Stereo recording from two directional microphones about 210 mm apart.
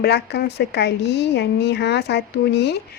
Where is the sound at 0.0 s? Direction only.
50° left (ahead or behind).